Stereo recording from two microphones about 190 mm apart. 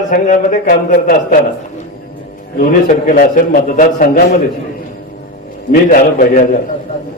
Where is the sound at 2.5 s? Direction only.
45° left (ahead or behind).